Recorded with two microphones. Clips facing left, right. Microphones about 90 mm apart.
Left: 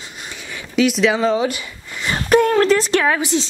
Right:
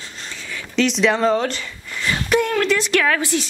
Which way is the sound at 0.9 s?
Centre (ahead or behind).